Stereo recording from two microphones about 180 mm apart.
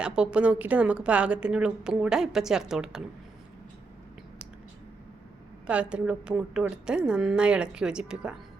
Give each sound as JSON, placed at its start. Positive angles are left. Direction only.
{"t": 0.0, "sound": "a woman's voice", "side_deg": -5}
{"t": 5.6, "sound": "a woman's voice", "side_deg": -5}